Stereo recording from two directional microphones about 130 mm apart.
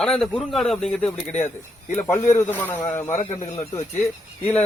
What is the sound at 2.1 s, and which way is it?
A man's voice, 20° left (ahead or behind).